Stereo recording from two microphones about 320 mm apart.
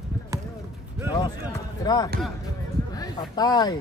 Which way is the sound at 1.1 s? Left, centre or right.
Centre.